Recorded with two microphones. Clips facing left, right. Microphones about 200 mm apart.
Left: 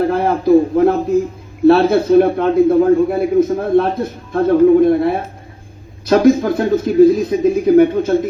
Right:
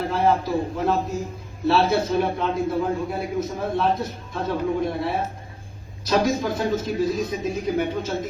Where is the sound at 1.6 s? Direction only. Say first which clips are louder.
Left 10 dB; 55° left (ahead or behind).